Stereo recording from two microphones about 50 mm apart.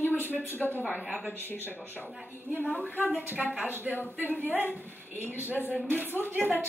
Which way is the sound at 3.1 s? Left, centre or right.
Right.